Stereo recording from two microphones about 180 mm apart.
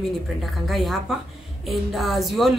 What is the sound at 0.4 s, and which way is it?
Speech, centre (ahead or behind).